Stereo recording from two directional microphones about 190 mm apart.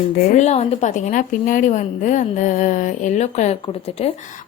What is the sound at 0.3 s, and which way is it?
A woman's voice, 35° left (ahead or behind).